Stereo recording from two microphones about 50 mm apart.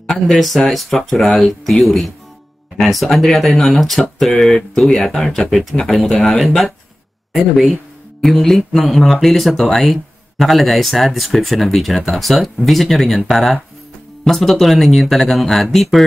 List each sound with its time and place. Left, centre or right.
0.0 s speech: centre